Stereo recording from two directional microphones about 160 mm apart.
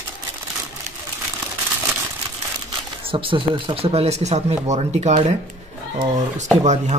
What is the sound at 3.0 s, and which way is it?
Speech, 35° right (ahead or behind).